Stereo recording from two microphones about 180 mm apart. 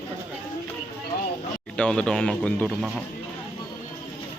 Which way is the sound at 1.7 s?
5° left (ahead or behind).